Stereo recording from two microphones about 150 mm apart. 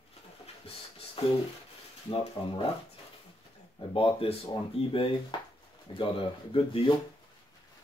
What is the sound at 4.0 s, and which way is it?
Speech, 40° left (ahead or behind).